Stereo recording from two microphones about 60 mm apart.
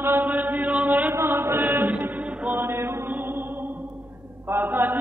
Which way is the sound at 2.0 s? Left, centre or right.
Right.